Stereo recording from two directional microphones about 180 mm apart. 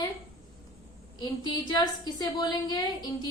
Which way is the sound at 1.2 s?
25° left (ahead or behind).